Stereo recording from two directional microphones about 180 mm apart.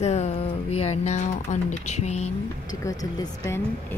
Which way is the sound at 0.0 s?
35° left (ahead or behind).